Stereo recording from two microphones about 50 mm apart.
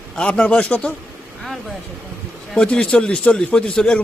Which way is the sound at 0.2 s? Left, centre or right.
Left.